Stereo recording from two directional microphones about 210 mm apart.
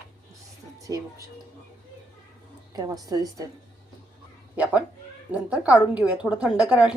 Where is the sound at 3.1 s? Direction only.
15° right (ahead or behind).